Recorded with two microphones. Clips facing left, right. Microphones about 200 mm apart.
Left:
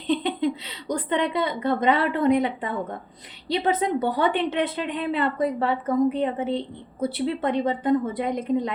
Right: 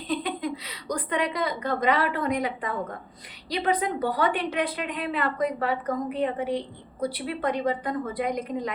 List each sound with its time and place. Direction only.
0.1 s a woman's voice: 25° left (ahead or behind)